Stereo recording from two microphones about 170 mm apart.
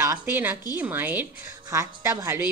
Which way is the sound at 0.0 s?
15° right (ahead or behind).